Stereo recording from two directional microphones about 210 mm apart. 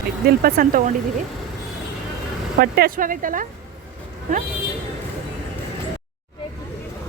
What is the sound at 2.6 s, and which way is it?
Speech, 45° right (ahead or behind).